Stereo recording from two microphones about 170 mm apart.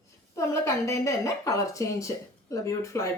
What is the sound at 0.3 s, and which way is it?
Speech, 15° left (ahead or behind).